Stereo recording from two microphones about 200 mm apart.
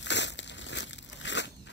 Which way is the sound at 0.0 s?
60° left (ahead or behind).